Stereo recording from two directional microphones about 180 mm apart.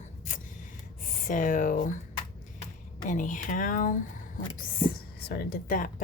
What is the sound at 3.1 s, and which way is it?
Speech, 45° left (ahead or behind).